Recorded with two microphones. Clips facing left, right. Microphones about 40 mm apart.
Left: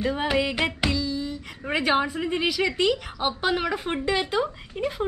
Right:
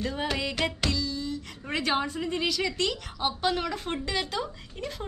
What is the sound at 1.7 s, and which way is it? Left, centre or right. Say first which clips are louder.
A woman's voice: left 5 dB; centre.